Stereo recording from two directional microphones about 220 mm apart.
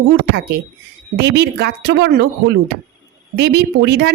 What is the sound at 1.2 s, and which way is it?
Speech, 50° right (ahead or behind).